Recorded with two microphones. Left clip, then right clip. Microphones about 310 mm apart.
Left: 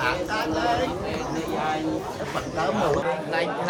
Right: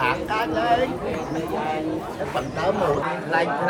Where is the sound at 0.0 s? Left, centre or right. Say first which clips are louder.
Right 2 dB; right.